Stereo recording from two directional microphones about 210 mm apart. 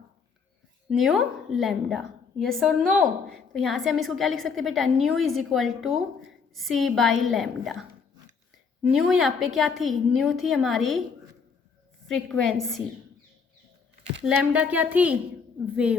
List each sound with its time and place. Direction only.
0.9 s a woman's voice: centre (ahead or behind)
8.9 s a woman's voice: centre (ahead or behind)
12.0 s a woman's voice: centre (ahead or behind)
14.3 s a woman's voice: 5° right (ahead or behind)